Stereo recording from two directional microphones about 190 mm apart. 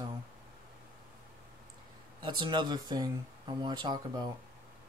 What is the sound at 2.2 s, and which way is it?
Speech, 25° right (ahead or behind).